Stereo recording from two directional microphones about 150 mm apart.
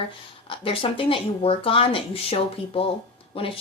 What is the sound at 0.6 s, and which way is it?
Speech, 35° left (ahead or behind).